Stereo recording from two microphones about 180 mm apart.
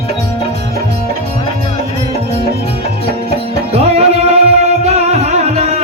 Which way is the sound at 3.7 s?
35° right (ahead or behind).